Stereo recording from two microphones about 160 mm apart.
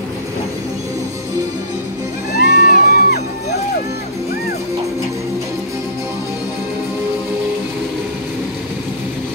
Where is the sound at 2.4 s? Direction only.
70° left (ahead or behind).